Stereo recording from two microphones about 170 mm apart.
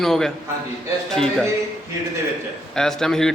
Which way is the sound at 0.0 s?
Centre (ahead or behind).